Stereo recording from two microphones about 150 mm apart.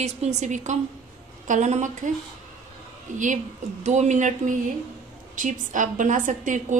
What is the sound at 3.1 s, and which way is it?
A woman's voice, 60° right (ahead or behind).